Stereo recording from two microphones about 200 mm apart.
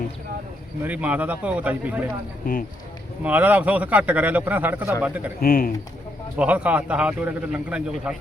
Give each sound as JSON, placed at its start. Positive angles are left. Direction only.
{"t": 0.9, "sound": "a man's voice", "side_deg": -10}
{"t": 3.2, "sound": "a man's voice", "side_deg": -10}
{"t": 5.4, "sound": "speech", "side_deg": 45}
{"t": 6.3, "sound": "a man's voice", "side_deg": -5}